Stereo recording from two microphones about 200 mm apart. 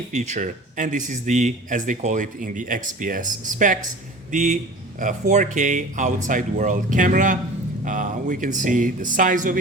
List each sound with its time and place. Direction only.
0.1 s speech: 35° right (ahead or behind)